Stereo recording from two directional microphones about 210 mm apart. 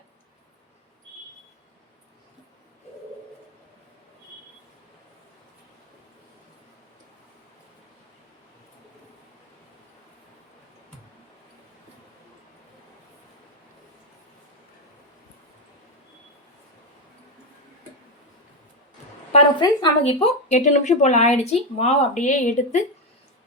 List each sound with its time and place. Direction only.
19.3 s speech: 25° left (ahead or behind)